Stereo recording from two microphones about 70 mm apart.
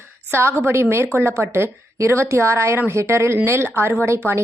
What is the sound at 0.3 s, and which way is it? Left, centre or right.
A woman's voice, right.